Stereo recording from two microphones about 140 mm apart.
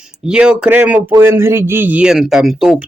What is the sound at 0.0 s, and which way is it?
Speech, 5° right (ahead or behind).